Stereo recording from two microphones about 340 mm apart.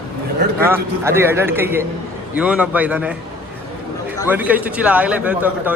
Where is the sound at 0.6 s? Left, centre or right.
Centre.